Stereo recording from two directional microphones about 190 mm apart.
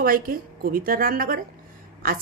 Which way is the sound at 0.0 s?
50° right (ahead or behind).